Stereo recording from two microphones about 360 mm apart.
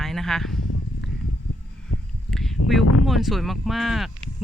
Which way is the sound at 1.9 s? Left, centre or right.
Left.